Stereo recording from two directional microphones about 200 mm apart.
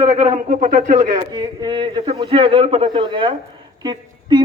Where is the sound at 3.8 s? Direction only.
20° right (ahead or behind).